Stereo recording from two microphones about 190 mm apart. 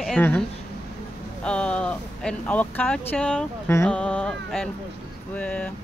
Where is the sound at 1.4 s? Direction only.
5° left (ahead or behind).